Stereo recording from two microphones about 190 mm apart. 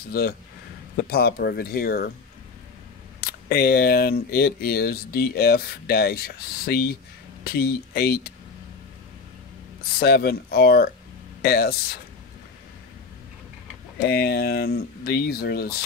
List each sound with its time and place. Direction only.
0.1 s speech: 55° left (ahead or behind)
3.2 s speech: 55° left (ahead or behind)
9.9 s speech: 55° left (ahead or behind)
14.0 s speech: 55° left (ahead or behind)